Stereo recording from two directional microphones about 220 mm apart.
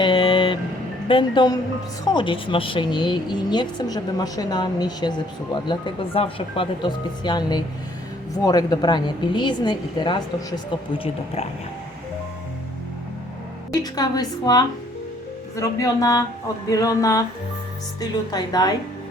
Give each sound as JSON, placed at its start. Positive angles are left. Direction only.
{"t": 0.0, "sound": "vehicle", "side_deg": 20}
{"t": 1.0, "sound": "speech", "side_deg": 20}
{"t": 13.7, "sound": "a woman's voice", "side_deg": 15}